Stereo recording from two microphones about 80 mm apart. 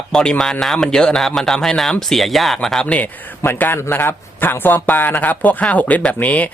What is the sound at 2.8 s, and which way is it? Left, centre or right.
Speech, centre.